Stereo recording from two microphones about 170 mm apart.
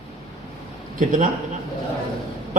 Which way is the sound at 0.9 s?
50° right (ahead or behind).